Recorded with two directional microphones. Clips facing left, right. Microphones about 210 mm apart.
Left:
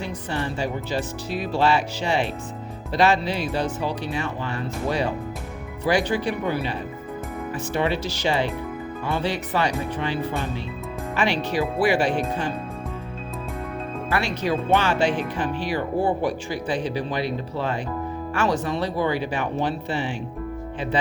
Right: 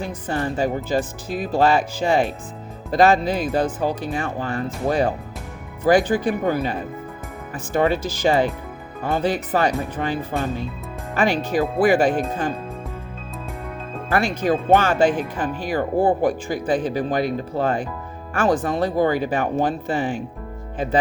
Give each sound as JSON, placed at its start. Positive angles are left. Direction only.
{"t": 0.0, "sound": "speech", "side_deg": -45}
{"t": 14.1, "sound": "speech", "side_deg": -50}